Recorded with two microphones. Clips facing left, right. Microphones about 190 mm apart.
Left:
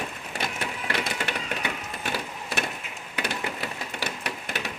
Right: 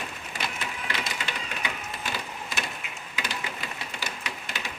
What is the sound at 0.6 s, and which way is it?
Cash register, 60° left (ahead or behind).